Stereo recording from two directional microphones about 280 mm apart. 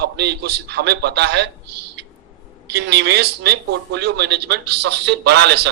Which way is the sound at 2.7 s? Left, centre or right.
Right.